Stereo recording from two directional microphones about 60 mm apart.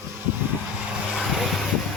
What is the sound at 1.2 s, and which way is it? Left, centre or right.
Vehicle, centre.